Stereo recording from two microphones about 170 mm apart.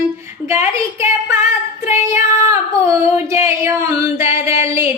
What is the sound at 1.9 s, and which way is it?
Child singing, 15° right (ahead or behind).